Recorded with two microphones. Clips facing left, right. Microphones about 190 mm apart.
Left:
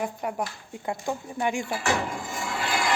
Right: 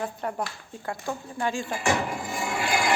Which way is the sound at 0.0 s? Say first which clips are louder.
Left 1 dB; 10° left (ahead or behind).